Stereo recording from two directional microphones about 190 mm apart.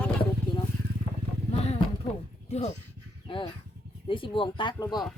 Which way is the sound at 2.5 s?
35° left (ahead or behind).